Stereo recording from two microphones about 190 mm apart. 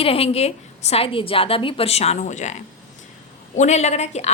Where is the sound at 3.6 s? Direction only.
35° left (ahead or behind).